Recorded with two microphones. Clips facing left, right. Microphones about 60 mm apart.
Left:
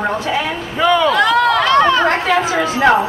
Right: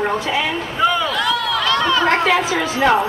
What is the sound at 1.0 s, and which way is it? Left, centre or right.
Run, left.